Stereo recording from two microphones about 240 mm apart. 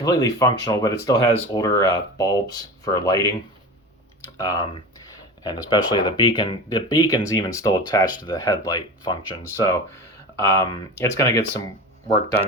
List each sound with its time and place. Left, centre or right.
0.0 s speech: centre
4.4 s speech: centre